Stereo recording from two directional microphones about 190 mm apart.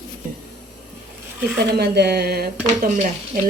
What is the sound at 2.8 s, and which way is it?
Speech, 40° right (ahead or behind).